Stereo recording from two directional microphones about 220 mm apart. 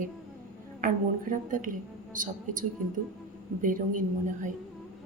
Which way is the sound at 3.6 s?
35° right (ahead or behind).